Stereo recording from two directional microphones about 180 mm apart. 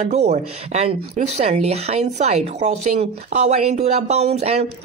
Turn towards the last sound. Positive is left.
turn(degrees=-35)  # may be behind; listen again after turning